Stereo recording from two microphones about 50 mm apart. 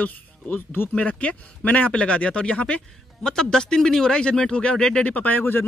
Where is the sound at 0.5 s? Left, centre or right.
Left.